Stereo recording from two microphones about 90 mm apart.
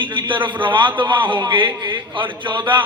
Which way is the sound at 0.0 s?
65° right (ahead or behind).